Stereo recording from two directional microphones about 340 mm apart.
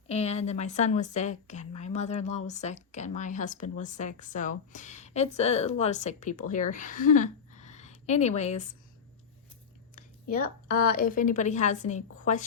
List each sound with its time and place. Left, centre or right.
0.1 s speech: centre
9.9 s a sound: left
10.9 s speech: left